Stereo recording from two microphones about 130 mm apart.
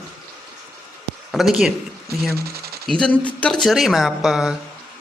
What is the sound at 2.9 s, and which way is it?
Speech, 5° left (ahead or behind).